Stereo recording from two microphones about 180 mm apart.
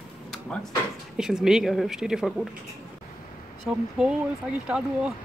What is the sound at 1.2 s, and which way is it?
Speech, 5° right (ahead or behind).